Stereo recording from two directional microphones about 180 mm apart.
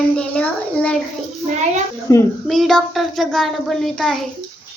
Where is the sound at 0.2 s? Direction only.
5° left (ahead or behind).